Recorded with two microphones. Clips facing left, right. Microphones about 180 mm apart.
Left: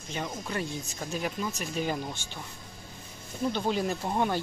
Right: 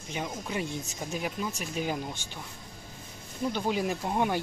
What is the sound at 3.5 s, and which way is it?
Speech, 10° right (ahead or behind).